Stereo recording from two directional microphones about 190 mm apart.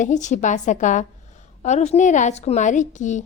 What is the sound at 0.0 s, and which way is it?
A woman's voice, 40° left (ahead or behind).